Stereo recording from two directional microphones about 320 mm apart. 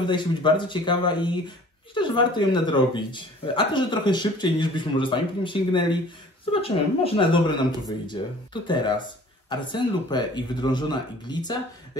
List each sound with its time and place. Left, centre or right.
0.0 s speech: centre
8.6 s speech: centre